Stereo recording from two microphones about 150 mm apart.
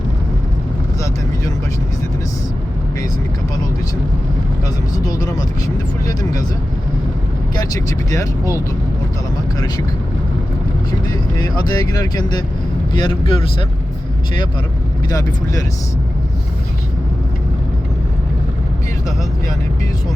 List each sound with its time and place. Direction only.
4.9 s speech: 25° left (ahead or behind)
8.1 s speech: 20° left (ahead or behind)
11.1 s speech: 25° left (ahead or behind)